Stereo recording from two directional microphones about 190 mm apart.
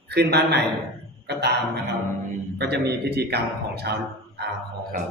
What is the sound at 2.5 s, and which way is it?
Mantra, 60° right (ahead or behind).